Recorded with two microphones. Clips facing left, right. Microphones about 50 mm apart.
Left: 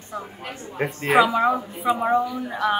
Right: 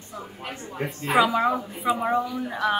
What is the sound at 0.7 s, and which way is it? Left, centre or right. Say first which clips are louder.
Speech: left 4 dB; left.